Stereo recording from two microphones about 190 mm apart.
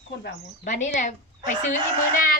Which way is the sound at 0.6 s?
40° left (ahead or behind).